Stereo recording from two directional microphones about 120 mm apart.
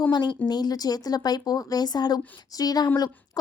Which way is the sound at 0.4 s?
35° left (ahead or behind).